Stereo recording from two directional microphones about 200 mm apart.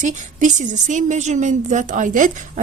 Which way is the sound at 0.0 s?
40° right (ahead or behind).